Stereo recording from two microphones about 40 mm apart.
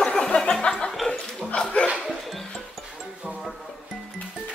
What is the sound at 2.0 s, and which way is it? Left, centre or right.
Music, centre.